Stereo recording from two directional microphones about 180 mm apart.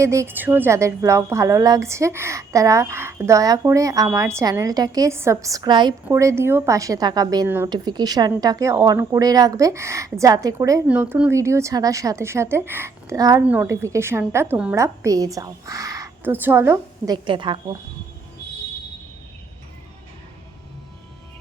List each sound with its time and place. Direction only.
0.0 s a woman's voice: 15° right (ahead or behind)
7.7 s a woman's voice: 25° right (ahead or behind)
13.4 s a woman's voice: 10° right (ahead or behind)
17.2 s a woman's voice: 25° right (ahead or behind)